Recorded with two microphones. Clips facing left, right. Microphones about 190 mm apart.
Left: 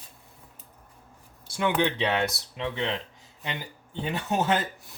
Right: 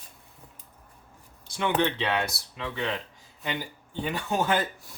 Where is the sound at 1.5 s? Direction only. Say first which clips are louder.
Left 1 dB; 10° left (ahead or behind).